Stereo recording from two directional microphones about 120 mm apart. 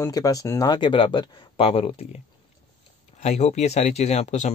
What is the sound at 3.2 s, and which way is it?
Speech, 65° left (ahead or behind).